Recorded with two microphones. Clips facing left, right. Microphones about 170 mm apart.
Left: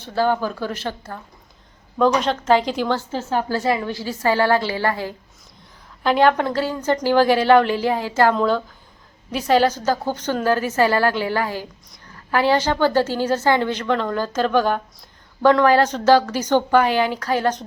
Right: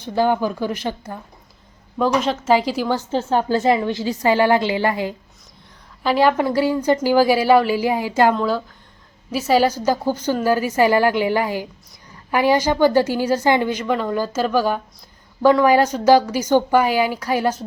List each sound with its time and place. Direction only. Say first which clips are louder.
0.0 s a woman's voice: right 2 dB; 15° right (ahead or behind)
3.0 s a woman's voice: right 4 dB; 25° right (ahead or behind)
6.0 s a woman's voice: even; 5° right (ahead or behind)